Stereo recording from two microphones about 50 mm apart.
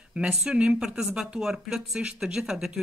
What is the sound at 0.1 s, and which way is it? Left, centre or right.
Speech, centre.